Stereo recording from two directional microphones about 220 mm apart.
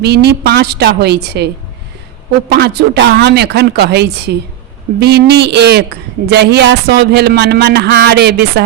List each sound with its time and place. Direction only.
0.0 s a woman's voice: 50° right (ahead or behind)
2.5 s a woman's voice: 50° right (ahead or behind)